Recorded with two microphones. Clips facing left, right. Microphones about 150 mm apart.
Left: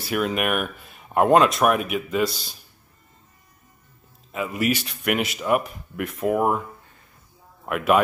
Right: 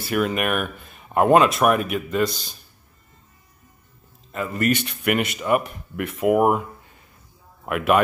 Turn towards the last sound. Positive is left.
turn(degrees=0)  # may be behind; listen again after turning